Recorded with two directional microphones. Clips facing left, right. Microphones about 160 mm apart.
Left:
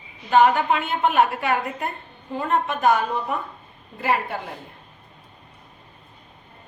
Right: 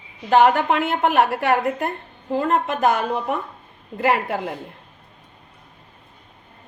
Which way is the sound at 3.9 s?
90° right.